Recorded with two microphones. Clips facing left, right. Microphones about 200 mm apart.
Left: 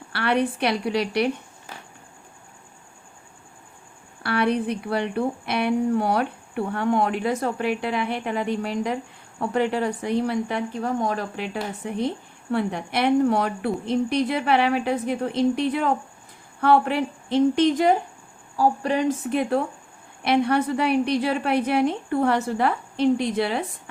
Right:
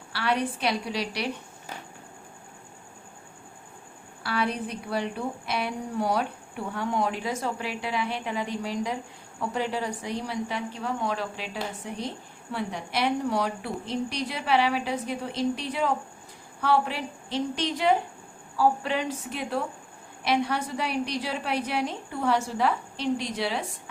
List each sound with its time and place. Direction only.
0.1 s a woman's voice: 55° left (ahead or behind)
4.2 s a woman's voice: 60° left (ahead or behind)
11.5 s a woman's voice: 55° left (ahead or behind)